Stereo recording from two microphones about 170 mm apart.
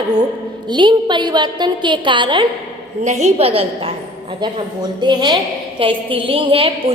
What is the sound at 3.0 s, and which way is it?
A woman's voice, 40° right (ahead or behind).